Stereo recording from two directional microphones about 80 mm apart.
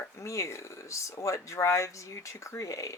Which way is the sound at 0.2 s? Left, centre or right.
Left.